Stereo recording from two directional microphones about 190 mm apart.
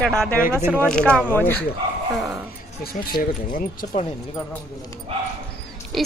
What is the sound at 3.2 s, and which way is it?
Speech, 45° left (ahead or behind).